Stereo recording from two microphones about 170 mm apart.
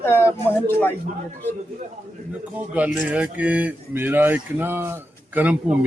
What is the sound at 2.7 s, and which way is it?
Speech, 10° right (ahead or behind).